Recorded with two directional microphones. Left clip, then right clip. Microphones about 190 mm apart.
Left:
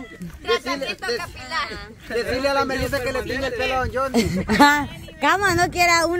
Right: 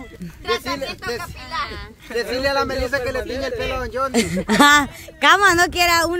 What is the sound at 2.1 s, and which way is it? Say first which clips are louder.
Speech: right 1 dB; 20° right (ahead or behind).